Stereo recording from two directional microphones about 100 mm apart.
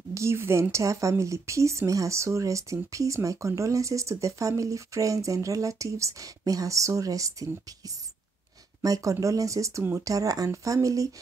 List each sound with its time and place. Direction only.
0.1 s speech: 30° right (ahead or behind)
8.8 s speech: 35° right (ahead or behind)